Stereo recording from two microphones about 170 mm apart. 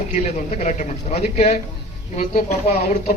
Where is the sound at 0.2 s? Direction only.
40° left (ahead or behind).